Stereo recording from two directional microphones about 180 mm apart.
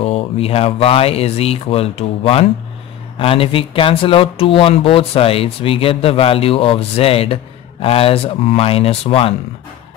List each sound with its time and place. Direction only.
0.0 s speech: 35° left (ahead or behind)